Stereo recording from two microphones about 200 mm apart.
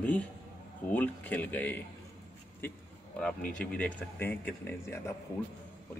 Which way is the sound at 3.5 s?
5° left (ahead or behind).